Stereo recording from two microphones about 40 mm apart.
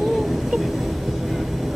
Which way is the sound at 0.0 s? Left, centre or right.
Centre.